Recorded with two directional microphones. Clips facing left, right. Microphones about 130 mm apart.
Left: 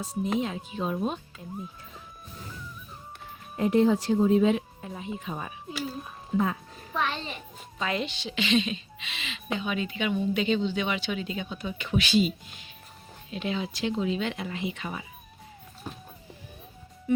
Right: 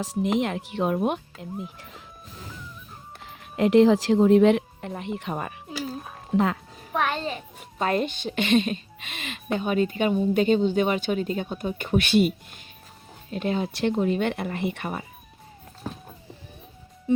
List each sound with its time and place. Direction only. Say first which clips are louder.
0.0 s speech: right 4 dB; 85° right; by 1.5 s 70° right (ahead or behind)
3.5 s speech: right 5 dB; 90° right; by 5.5 s 65° right (ahead or behind)
6.3 s music: right 4 dB; 70° right (ahead or behind); by 7.3 s 50° right (ahead or behind)
7.8 s a woman's voice: right 6 dB; 50° right (ahead or behind)